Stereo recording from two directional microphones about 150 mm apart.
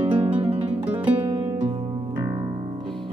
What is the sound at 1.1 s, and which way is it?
Music, 15° right (ahead or behind).